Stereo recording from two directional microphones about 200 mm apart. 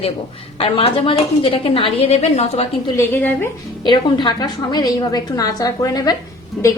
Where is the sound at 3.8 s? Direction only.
25° left (ahead or behind).